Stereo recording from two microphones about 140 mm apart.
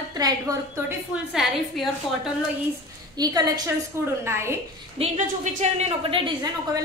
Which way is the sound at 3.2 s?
30° right (ahead or behind).